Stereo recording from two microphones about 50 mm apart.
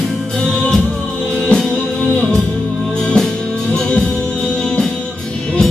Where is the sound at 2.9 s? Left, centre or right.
Centre.